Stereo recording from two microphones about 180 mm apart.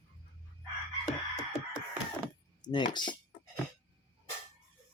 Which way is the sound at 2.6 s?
25° left (ahead or behind).